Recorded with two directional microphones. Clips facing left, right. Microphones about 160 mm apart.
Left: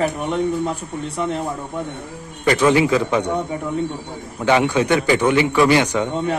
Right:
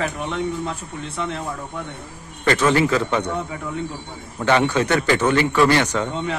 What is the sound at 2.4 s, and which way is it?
Speech, 10° left (ahead or behind).